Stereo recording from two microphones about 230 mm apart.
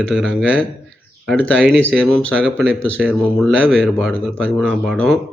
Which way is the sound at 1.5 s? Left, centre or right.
Centre.